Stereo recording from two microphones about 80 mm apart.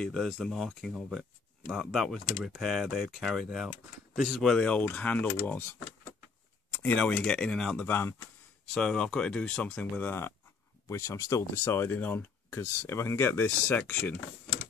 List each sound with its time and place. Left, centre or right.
0.0 s speech: centre
4.5 s speech: centre
7.8 s speech: left
8.6 s speech: centre; by 10.3 s left
10.9 s speech: left